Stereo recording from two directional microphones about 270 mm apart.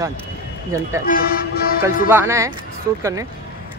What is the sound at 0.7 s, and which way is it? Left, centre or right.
Speech, centre.